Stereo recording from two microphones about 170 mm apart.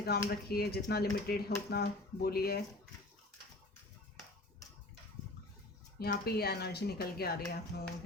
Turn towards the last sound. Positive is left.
turn(degrees=65)  # may be behind; listen again after turning